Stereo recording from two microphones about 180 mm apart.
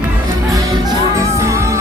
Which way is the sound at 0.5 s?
20° right (ahead or behind).